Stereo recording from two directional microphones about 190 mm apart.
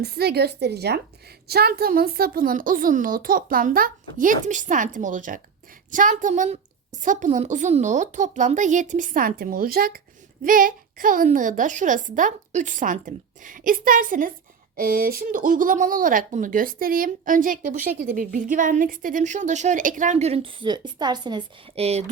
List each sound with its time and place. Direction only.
0.0 s a woman's voice: 60° right (ahead or behind); by 22.0 s 30° right (ahead or behind)